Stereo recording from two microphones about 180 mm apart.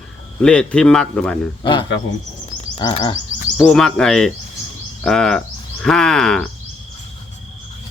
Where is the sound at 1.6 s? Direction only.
25° left (ahead or behind).